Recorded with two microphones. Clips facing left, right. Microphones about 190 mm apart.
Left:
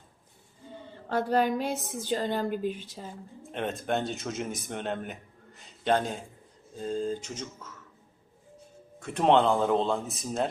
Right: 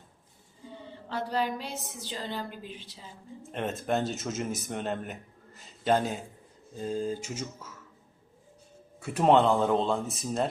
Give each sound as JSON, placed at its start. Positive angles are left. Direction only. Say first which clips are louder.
{"t": 1.0, "sound": "speech", "louder": "left 5 dB", "side_deg": 50}
{"t": 3.4, "sound": "speech", "louder": "even", "side_deg": 0}
{"t": 9.0, "sound": "speech", "louder": "right 1 dB", "side_deg": -5}